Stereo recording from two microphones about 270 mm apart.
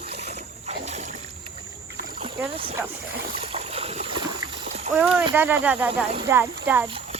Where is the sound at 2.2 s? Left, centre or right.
Centre.